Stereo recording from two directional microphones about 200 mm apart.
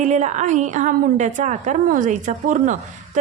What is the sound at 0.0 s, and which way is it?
Speech, 35° right (ahead or behind).